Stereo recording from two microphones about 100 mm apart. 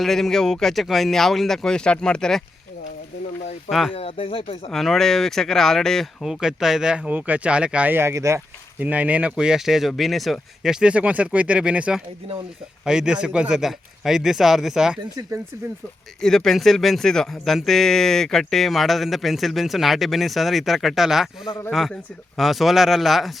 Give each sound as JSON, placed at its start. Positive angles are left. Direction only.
{"t": 0.0, "sound": "a man's voice", "side_deg": 5}
{"t": 3.7, "sound": "a man's voice", "side_deg": 0}
{"t": 3.9, "sound": "speech", "side_deg": 65}
{"t": 4.7, "sound": "a man's voice", "side_deg": 5}
{"t": 8.8, "sound": "a man's voice", "side_deg": -15}
{"t": 16.2, "sound": "a man's voice", "side_deg": 5}